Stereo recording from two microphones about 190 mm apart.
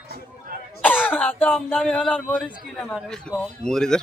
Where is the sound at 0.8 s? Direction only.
10° left (ahead or behind).